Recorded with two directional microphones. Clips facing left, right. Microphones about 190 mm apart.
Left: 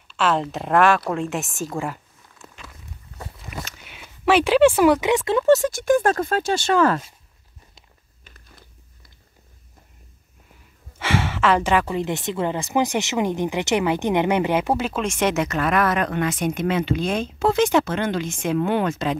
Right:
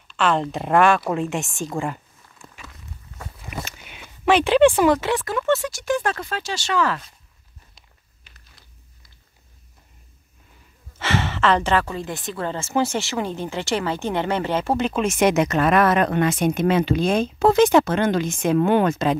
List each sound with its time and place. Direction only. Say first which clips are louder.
0.1 s speech: right 1 dB; 5° left (ahead or behind)
2.4 s walk: even; centre (ahead or behind)
3.4 s a sound: right 4 dB; 5° right (ahead or behind)
5.1 s speech: left 4 dB; 25° left (ahead or behind)
5.5 s speech: left 5 dB; 50° left (ahead or behind)
8.2 s crumpling: left 7 dB; 45° left (ahead or behind)
10.9 s speech: even; 10° left (ahead or behind); by 19.1 s 40° right (ahead or behind)